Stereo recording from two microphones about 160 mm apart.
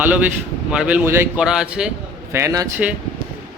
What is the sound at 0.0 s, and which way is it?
Speech, 10° right (ahead or behind).